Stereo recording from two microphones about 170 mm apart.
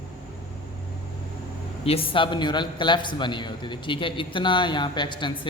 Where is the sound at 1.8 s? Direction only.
35° left (ahead or behind).